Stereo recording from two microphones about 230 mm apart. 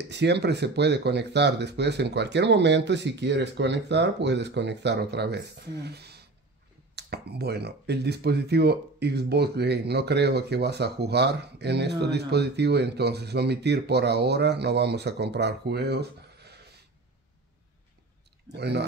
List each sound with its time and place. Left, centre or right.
0.1 s speech: right
18.5 s speech: right